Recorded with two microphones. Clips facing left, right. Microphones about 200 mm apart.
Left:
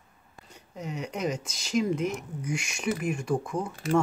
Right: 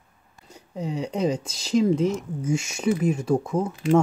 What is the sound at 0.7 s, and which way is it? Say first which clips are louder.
Speech: right 7 dB; 30° right (ahead or behind).